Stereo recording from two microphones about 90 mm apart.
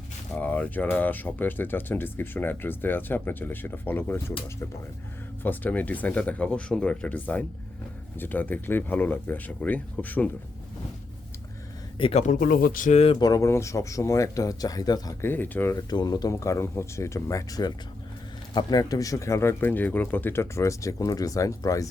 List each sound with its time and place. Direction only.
0.3 s speech: 15° left (ahead or behind)
5.4 s speech: 20° left (ahead or behind)
12.0 s speech: 70° left (ahead or behind)
13.1 s speech: 40° left (ahead or behind)
15.2 s speech: 20° left (ahead or behind)
15.9 s speech: 50° left (ahead or behind)
16.3 s speech: 35° left (ahead or behind)